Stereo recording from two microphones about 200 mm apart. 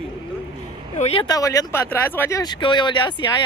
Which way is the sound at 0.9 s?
30° left (ahead or behind).